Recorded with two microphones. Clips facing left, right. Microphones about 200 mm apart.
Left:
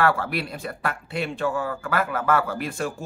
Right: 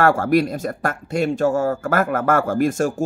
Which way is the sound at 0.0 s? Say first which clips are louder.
Right 7 dB; 45° right (ahead or behind).